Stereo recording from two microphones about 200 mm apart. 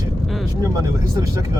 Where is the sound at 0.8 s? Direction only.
15° right (ahead or behind).